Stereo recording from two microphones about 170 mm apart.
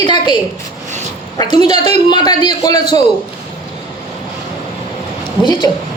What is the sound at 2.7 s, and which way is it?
Speech, 40° right (ahead or behind).